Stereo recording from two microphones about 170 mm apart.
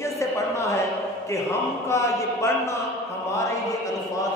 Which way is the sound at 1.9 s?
15° left (ahead or behind).